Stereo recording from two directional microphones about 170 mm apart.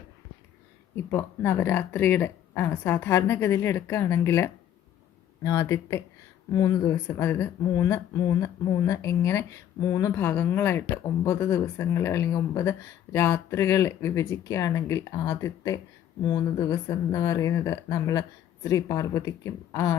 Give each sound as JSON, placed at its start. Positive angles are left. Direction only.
{"t": 0.9, "sound": "speech", "side_deg": 15}